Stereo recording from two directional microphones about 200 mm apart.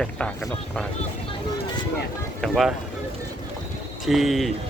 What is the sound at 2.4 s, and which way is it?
Speech, centre (ahead or behind).